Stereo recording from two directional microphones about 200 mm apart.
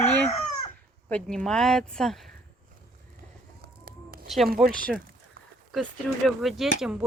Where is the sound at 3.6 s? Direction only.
50° right (ahead or behind).